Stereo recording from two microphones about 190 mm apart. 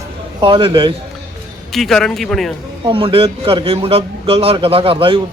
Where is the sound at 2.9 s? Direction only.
30° right (ahead or behind).